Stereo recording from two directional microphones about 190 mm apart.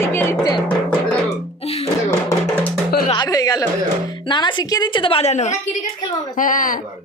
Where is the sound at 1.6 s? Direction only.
35° left (ahead or behind).